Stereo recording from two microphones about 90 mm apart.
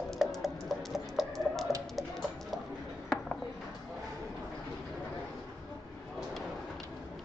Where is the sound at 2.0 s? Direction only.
Centre (ahead or behind).